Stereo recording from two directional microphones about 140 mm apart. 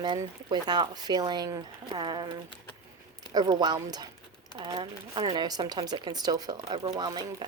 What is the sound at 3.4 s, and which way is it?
Speech, 30° right (ahead or behind).